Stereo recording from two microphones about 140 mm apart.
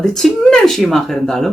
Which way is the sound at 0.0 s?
5° left (ahead or behind).